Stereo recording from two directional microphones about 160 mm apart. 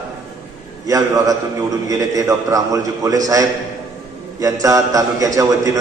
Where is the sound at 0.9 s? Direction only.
20° right (ahead or behind).